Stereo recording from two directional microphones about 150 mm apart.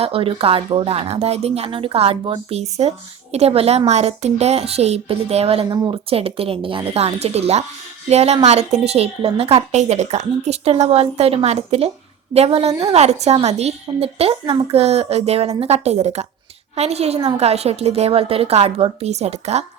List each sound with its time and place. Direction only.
0.0 s a woman's voice: 40° right (ahead or behind)